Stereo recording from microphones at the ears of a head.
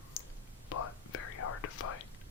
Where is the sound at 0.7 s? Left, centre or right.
Left.